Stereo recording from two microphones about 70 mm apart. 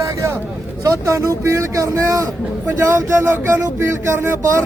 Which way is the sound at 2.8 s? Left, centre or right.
Right.